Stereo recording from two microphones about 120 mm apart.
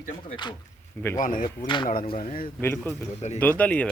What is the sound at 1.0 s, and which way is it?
Speech, 15° left (ahead or behind).